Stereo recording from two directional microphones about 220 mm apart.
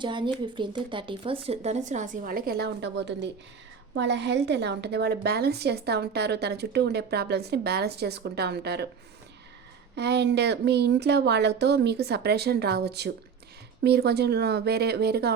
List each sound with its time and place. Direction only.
0.0 s a woman's voice: 20° right (ahead or behind); by 8.9 s 45° right (ahead or behind)
9.9 s a woman's voice: 50° right (ahead or behind)